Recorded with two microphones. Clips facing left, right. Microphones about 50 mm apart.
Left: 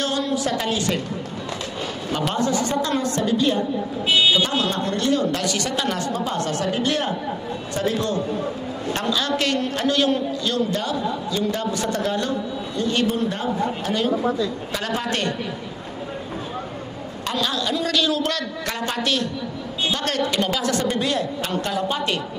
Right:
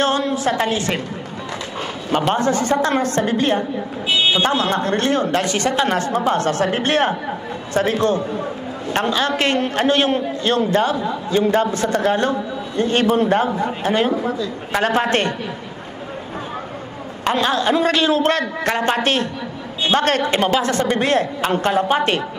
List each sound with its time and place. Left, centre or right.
0.0 s speech: right
2.1 s speech: right
17.2 s speech: right